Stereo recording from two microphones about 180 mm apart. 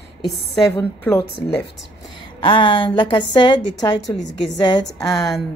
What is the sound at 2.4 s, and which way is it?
A woman's voice, 30° left (ahead or behind).